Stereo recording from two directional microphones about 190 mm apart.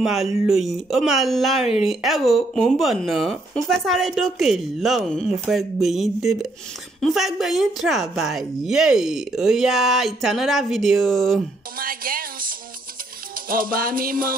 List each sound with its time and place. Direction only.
0.0 s speech: centre (ahead or behind)
11.8 s music: 50° right (ahead or behind)